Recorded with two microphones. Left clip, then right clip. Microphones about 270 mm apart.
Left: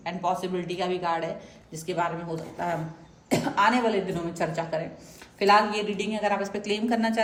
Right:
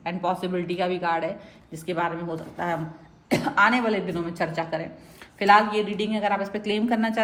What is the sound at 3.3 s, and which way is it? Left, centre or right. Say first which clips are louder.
Speech: right 2 dB; right.